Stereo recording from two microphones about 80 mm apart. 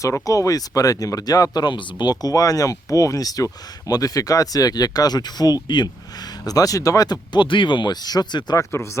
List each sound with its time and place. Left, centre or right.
0.0 s speech: left
8.5 s speech: left